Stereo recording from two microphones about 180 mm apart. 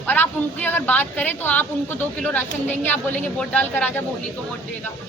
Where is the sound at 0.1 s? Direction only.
10° left (ahead or behind).